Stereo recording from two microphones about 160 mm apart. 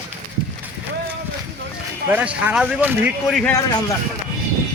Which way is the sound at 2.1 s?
10° right (ahead or behind).